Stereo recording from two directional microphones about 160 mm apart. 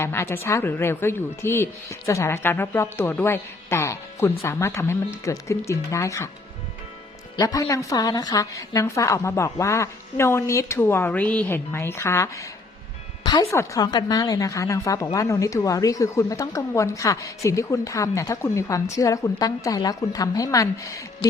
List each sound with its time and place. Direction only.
0.0 s speech: 15° left (ahead or behind)
7.3 s speech: 20° left (ahead or behind)